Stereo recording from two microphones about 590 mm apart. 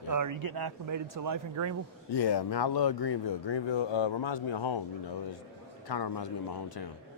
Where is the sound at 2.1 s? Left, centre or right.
Left.